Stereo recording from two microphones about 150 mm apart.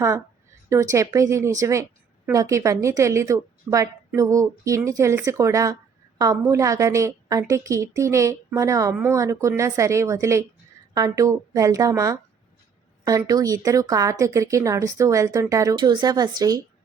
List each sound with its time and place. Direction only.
0.7 s speech: 20° right (ahead or behind)